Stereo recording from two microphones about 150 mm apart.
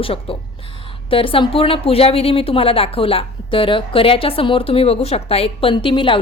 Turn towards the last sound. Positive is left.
turn(degrees=35)  # may be behind; listen again after turning